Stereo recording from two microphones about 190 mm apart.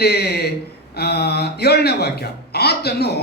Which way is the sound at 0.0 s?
60° left (ahead or behind).